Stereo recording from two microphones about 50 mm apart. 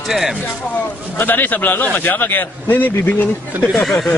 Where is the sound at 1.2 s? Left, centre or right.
Left.